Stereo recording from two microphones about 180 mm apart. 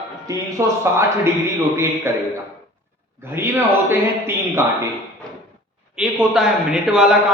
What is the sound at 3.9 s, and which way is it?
Speech, 15° right (ahead or behind).